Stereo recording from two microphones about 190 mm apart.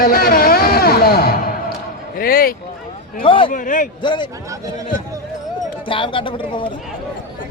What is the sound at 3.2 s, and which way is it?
Speech, 25° left (ahead or behind).